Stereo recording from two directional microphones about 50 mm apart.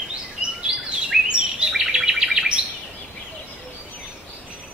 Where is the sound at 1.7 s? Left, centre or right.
Centre.